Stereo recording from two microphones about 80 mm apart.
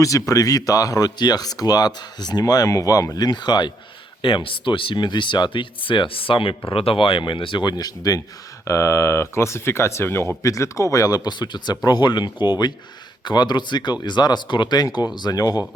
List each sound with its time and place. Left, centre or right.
0.0 s speech: left
3.2 s speech: left
4.2 s speech: left
7.7 s speech: left
8.6 s speech: left